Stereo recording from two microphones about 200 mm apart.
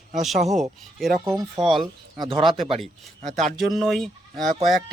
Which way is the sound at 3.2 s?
35° right (ahead or behind).